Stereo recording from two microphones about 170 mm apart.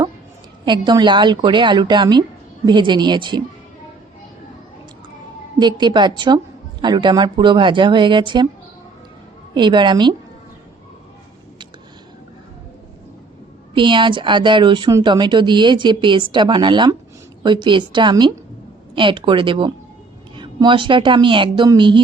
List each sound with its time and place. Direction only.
0.6 s speech: 25° right (ahead or behind)
5.5 s speech: 25° right (ahead or behind)
9.6 s speech: 25° right (ahead or behind)
13.7 s speech: 30° right (ahead or behind)